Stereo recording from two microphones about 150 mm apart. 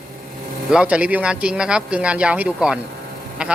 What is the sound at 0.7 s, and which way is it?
A man's voice, 5° right (ahead or behind).